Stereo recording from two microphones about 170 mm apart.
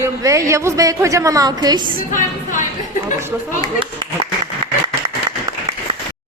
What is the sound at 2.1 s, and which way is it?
Speech, 50° left (ahead or behind).